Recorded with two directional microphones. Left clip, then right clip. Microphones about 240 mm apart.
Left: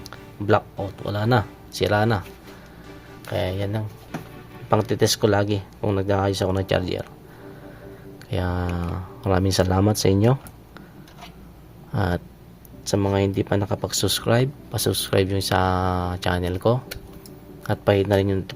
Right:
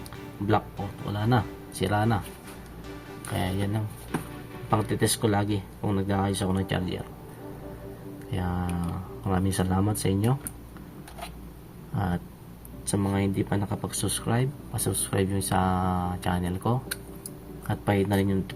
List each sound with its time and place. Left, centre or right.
1.0 s speech: left
3.3 s speech: left
8.3 s speech: left
11.9 s speech: left